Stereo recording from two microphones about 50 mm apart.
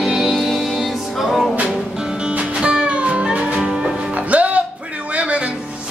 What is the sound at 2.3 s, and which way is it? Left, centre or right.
Music, right.